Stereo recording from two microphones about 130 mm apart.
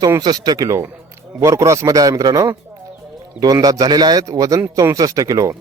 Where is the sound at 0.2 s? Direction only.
30° right (ahead or behind).